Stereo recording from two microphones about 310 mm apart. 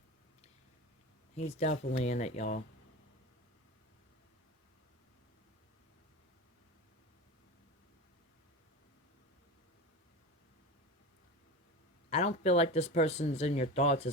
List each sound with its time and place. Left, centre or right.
1.4 s speech: left
12.1 s speech: left